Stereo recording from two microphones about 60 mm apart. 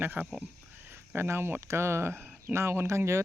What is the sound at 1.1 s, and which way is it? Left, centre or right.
Speech, right.